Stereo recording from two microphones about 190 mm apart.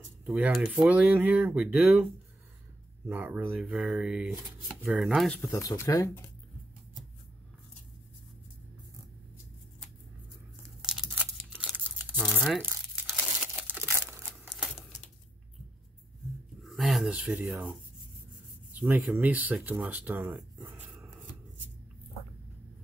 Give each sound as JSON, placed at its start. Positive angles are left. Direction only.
{"t": 0.2, "sound": "speech", "side_deg": -5}
{"t": 3.1, "sound": "speech", "side_deg": -10}
{"t": 10.8, "sound": "crumpling", "side_deg": -5}
{"t": 16.6, "sound": "speech", "side_deg": 0}